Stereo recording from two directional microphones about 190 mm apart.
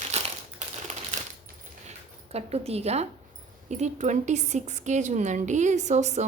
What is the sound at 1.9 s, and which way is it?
A woman's voice, 35° right (ahead or behind).